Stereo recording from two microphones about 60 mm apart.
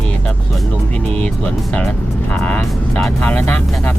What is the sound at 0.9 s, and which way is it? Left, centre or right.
Speech, left.